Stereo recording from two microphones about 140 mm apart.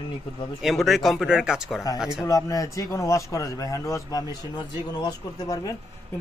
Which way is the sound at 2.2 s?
25° left (ahead or behind).